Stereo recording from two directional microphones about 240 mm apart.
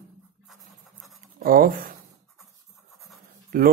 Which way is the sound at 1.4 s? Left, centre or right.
Right.